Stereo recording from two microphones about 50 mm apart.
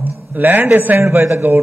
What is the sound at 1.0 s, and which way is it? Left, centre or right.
Speech, right.